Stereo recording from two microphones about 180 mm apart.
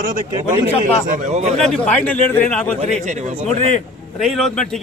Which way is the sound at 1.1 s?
40° right (ahead or behind).